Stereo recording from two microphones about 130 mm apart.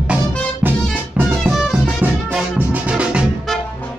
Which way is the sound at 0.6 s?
15° right (ahead or behind).